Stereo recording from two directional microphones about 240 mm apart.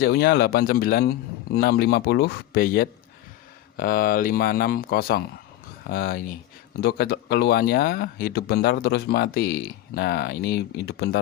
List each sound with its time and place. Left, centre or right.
0.0 s speech: left